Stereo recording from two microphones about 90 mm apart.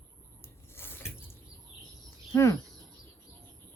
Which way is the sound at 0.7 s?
25° left (ahead or behind).